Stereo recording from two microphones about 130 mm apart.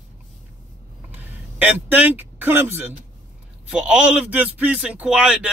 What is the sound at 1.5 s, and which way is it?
Speech, 15° right (ahead or behind).